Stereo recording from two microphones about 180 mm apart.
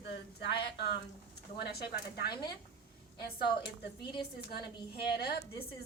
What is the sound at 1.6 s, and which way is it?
Speech, 65° left (ahead or behind).